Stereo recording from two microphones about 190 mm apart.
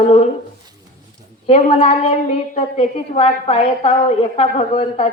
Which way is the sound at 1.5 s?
35° left (ahead or behind).